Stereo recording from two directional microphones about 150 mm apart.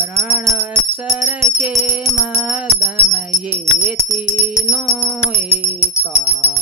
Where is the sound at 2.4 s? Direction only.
10° right (ahead or behind).